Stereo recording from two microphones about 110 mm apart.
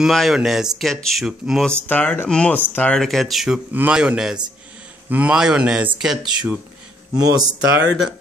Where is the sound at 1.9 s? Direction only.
15° left (ahead or behind).